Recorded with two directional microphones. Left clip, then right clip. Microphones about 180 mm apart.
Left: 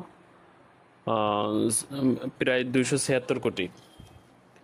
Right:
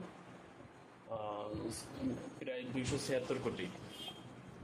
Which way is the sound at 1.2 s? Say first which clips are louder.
Left 16 dB; 70° left (ahead or behind).